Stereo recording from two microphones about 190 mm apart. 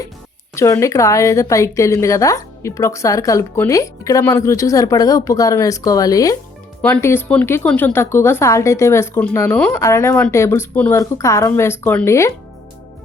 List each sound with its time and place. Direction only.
0.5 s a woman's voice: 15° left (ahead or behind)